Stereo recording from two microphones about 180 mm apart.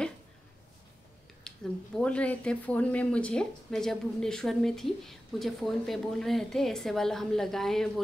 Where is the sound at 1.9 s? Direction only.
5° left (ahead or behind).